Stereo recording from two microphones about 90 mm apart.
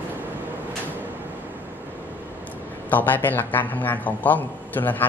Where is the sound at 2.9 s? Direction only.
20° left (ahead or behind).